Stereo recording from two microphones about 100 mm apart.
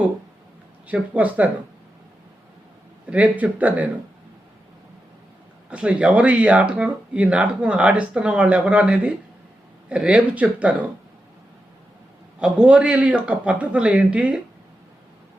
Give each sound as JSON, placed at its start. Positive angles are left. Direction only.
{"t": 0.9, "sound": "speech", "side_deg": -15}
{"t": 3.1, "sound": "speech", "side_deg": -15}
{"t": 5.7, "sound": "speech", "side_deg": -10}
{"t": 12.4, "sound": "speech", "side_deg": -10}